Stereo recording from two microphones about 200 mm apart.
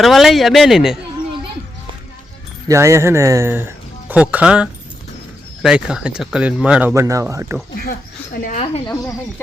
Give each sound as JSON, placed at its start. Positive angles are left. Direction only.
{"t": 0.0, "sound": "speech", "side_deg": 0}
{"t": 2.6, "sound": "speech", "side_deg": -15}
{"t": 7.8, "sound": "speech", "side_deg": 50}